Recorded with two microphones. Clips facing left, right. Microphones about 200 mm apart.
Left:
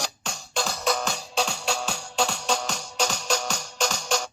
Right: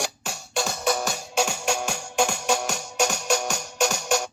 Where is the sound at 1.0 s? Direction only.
10° right (ahead or behind).